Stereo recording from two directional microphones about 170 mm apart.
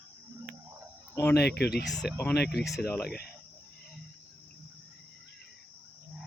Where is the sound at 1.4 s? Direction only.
70° left (ahead or behind).